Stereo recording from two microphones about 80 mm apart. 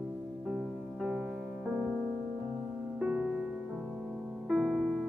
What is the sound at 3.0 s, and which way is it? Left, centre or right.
Music, right.